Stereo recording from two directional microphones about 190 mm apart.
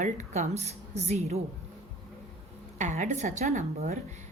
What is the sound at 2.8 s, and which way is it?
Speech, 40° right (ahead or behind).